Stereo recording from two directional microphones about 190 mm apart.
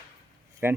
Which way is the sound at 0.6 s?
10° right (ahead or behind).